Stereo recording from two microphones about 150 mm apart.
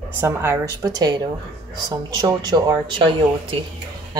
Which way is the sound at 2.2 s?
25° right (ahead or behind).